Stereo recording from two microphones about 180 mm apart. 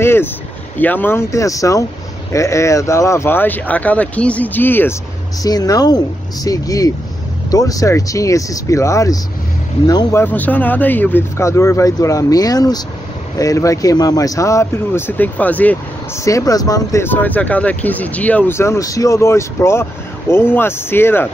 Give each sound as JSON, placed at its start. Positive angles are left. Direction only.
{"t": 0.0, "sound": "vehicle", "side_deg": 15}
{"t": 0.7, "sound": "speech", "side_deg": 10}
{"t": 10.2, "sound": "speech", "side_deg": 10}
{"t": 16.3, "sound": "speech", "side_deg": 20}